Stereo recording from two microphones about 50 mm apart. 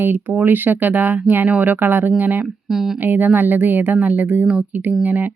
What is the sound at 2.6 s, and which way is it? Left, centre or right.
Speech, centre.